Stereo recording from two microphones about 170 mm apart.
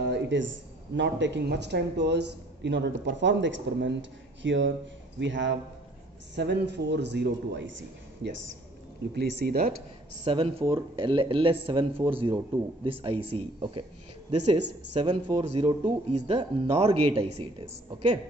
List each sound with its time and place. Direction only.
0.0 s a sound: 85° right
0.9 s speech: 90° right
9.1 s speech: 80° right
10.2 s speech: 30° right (ahead or behind)